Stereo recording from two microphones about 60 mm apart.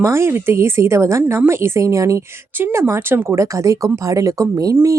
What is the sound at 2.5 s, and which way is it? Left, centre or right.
Speech, right.